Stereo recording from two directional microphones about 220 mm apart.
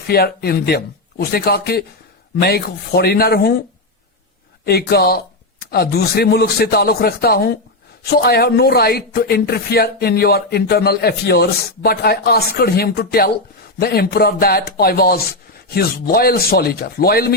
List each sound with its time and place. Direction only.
0.1 s speech: 45° left (ahead or behind)
4.6 s speech: 45° left (ahead or behind)